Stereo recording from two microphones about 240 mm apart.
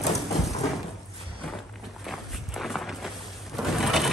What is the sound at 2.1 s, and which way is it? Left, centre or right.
Walk, centre.